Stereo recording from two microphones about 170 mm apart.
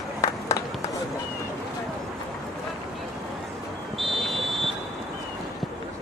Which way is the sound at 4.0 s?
Centre (ahead or behind).